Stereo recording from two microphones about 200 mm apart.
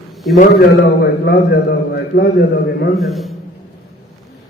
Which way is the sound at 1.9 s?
50° left (ahead or behind).